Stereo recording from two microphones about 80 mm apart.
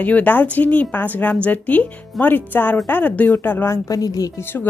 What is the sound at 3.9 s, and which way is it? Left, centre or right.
Speech, left.